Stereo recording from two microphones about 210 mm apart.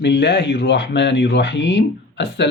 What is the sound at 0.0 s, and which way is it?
Speech, 55° left (ahead or behind).